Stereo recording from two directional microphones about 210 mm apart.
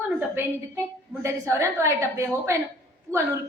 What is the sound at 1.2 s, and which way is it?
A woman's voice, 15° right (ahead or behind).